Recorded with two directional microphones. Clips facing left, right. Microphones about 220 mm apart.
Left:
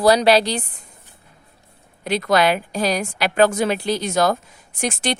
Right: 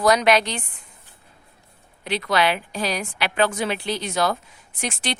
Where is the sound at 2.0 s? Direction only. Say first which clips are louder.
Left 4 dB; 45° left (ahead or behind).